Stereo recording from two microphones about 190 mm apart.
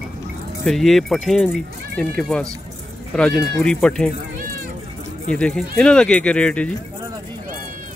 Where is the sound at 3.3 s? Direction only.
60° right (ahead or behind).